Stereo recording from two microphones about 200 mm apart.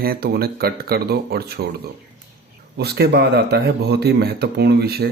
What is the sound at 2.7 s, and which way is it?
Speech, 55° right (ahead or behind).